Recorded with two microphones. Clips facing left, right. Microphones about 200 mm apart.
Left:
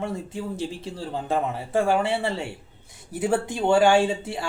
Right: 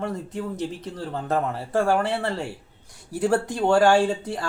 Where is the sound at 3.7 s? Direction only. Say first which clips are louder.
Even; 5° left (ahead or behind).